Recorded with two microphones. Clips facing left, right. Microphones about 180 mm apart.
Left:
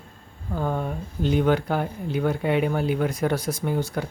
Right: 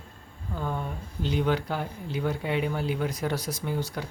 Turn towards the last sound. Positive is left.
turn(degrees=50)  # may be behind; listen again after turning